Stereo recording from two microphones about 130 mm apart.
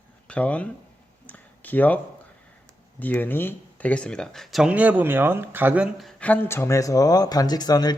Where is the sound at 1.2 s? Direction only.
15° left (ahead or behind).